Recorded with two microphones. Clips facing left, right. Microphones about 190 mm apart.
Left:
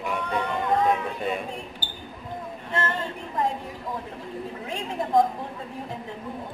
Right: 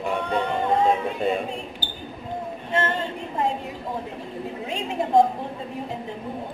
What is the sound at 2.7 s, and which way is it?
Speech, 25° right (ahead or behind).